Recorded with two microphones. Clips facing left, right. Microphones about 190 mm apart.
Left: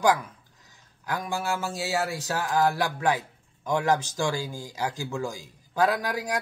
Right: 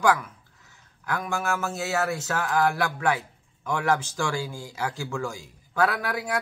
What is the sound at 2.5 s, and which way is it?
Mantra, 35° left (ahead or behind).